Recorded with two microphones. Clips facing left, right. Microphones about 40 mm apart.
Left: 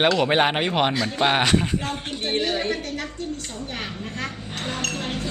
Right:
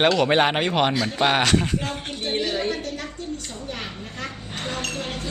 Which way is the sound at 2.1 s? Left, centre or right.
Left.